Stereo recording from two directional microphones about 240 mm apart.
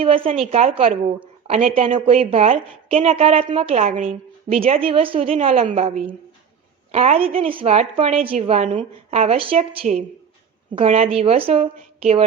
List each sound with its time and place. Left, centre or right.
0.0 s a woman's voice: right